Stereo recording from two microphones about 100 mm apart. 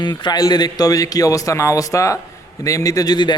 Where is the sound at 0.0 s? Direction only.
45° left (ahead or behind).